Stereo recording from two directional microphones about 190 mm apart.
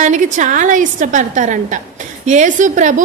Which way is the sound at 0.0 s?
40° right (ahead or behind).